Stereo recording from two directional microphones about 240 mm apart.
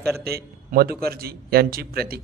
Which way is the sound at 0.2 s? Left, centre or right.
Right.